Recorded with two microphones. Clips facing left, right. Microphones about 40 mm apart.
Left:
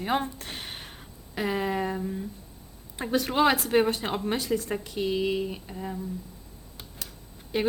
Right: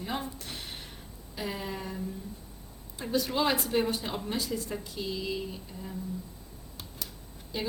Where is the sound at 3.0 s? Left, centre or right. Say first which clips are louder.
Left 5 dB; left.